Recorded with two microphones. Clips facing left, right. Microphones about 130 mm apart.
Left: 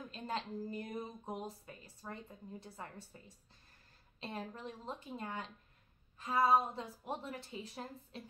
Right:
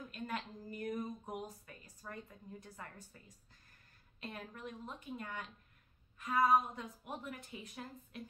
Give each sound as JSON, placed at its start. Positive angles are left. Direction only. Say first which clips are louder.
{"t": 0.1, "sound": "a woman's voice", "louder": "left 3 dB", "side_deg": 30}